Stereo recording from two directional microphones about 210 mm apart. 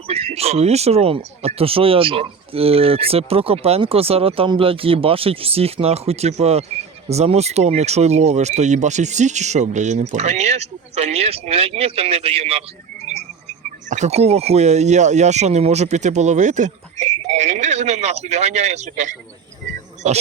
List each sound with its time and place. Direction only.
0.1 s speech: 30° right (ahead or behind)